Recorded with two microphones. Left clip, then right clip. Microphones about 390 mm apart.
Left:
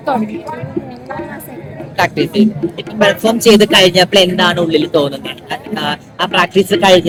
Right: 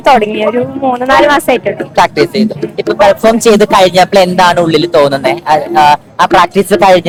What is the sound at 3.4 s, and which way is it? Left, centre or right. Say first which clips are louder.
Speech: even; right.